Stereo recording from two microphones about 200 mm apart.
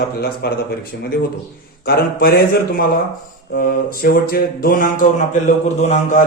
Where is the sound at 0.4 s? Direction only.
50° left (ahead or behind).